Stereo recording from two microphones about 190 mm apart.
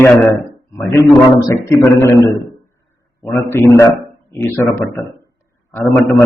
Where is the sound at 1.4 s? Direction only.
15° left (ahead or behind).